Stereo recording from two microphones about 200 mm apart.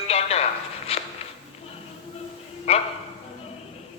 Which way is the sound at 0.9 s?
30° left (ahead or behind).